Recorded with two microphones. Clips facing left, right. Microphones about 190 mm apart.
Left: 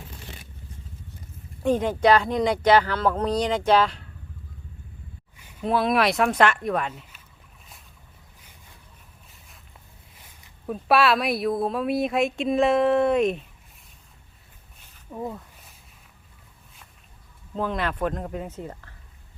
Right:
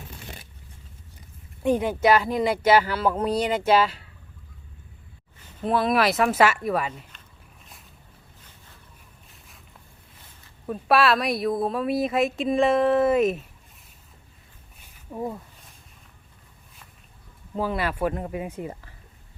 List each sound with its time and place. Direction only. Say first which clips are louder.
1.6 s speech: left 1 dB; 10° right (ahead or behind)
5.4 s a sound: right 1 dB; 10° left (ahead or behind)
5.6 s a woman's voice: even; centre (ahead or behind)
10.7 s a woman's voice: even; centre (ahead or behind)
15.1 s speech: right 2 dB; 10° right (ahead or behind)
17.5 s speech: right 1 dB; 5° right (ahead or behind)